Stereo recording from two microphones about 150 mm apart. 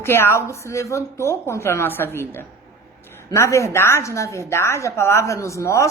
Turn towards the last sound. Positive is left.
turn(degrees=20)  # may be behind; listen again after turning